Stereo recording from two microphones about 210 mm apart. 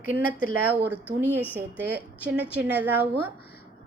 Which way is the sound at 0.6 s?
10° right (ahead or behind).